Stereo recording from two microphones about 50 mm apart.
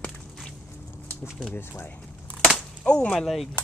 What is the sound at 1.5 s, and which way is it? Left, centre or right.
Speech, left.